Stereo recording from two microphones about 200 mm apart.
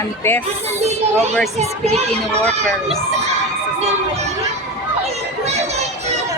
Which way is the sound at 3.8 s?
35° right (ahead or behind).